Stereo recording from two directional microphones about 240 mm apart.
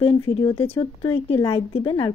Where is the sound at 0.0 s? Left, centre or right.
Left.